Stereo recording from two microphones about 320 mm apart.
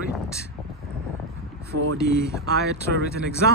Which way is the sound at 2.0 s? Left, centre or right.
Left.